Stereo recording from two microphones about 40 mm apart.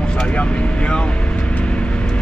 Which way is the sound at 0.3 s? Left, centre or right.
Left.